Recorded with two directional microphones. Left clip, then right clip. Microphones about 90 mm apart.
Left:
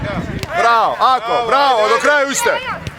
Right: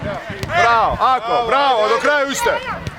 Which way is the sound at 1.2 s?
40° left (ahead or behind).